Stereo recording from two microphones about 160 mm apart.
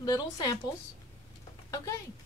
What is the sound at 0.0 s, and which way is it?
Speech, 25° left (ahead or behind).